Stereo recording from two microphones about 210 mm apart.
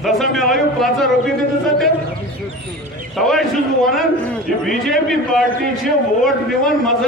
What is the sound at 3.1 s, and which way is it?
Speech, centre (ahead or behind).